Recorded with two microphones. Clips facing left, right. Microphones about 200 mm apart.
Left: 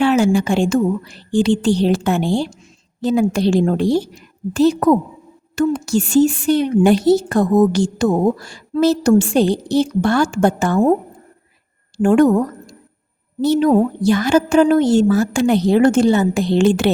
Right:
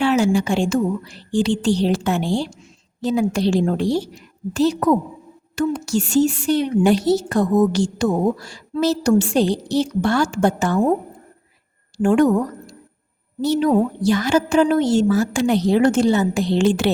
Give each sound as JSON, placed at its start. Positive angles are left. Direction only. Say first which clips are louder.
{"t": 0.0, "sound": "a woman's voice", "louder": "left 3 dB", "side_deg": 55}
{"t": 12.0, "sound": "a woman's voice", "louder": "left 3 dB", "side_deg": 50}
{"t": 13.4, "sound": "a woman's voice", "louder": "left 3 dB", "side_deg": 50}